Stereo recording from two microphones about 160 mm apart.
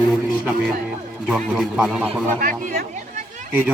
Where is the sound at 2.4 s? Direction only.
60° right (ahead or behind).